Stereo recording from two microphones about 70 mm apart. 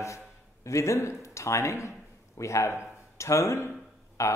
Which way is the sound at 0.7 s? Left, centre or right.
Left.